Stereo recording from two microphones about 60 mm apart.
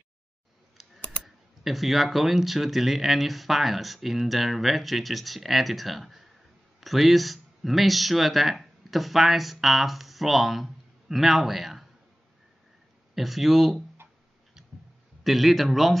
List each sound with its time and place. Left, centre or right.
0.7 s speech: centre
13.1 s speech: centre
15.2 s speech: centre